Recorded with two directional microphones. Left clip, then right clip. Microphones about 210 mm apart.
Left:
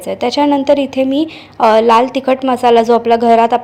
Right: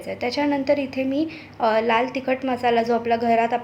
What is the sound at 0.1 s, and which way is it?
A woman's voice, 30° left (ahead or behind).